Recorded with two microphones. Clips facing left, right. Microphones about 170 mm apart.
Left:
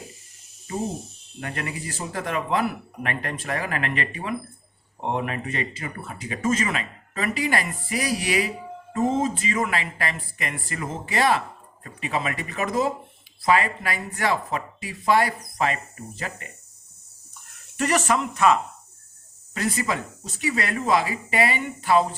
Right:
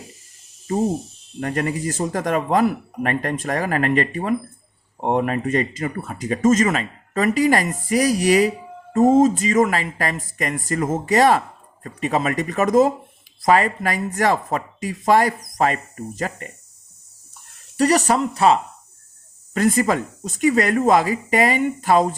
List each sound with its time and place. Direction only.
1.4 s speech: 45° right (ahead or behind)
17.7 s speech: 35° right (ahead or behind)
19.5 s speech: 50° right (ahead or behind)